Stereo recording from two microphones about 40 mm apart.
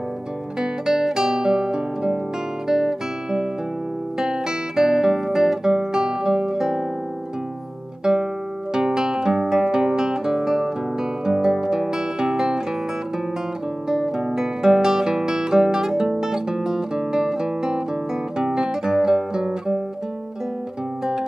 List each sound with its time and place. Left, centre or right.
0.6 s music: centre
2.7 s guitar: centre
8.0 s guitar: centre
11.2 s music: centre
13.8 s music: centre
18.4 s guitar: centre